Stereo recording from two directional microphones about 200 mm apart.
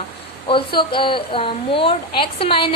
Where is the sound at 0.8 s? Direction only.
25° left (ahead or behind).